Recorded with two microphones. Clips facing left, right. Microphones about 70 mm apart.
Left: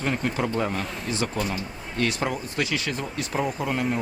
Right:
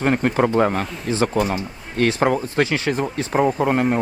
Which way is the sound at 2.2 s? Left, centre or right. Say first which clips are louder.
Right 9 dB; right.